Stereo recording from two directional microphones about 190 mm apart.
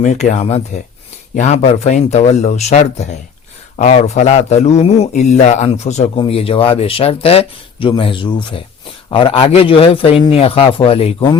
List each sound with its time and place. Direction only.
0.0 s speech: 40° left (ahead or behind)